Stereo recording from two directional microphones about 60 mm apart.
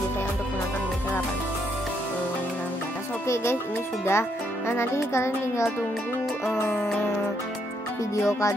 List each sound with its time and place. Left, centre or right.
4.0 s a child's voice: left
6.5 s music: left
8.2 s music: left